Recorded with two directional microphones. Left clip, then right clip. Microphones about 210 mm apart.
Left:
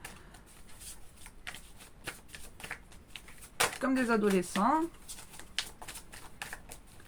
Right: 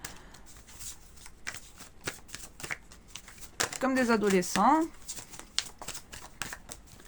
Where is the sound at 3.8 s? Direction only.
50° right (ahead or behind).